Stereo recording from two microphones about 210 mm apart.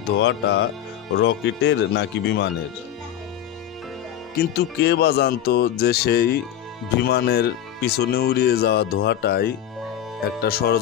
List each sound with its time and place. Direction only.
0.2 s speech: 60° left (ahead or behind)
4.4 s speech: 50° left (ahead or behind)